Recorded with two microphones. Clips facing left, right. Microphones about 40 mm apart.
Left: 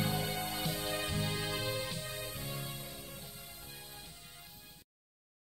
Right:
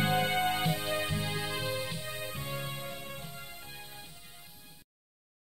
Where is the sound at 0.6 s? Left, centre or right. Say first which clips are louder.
Right 5 dB; right.